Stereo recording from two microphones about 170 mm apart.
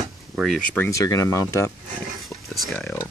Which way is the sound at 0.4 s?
5° left (ahead or behind).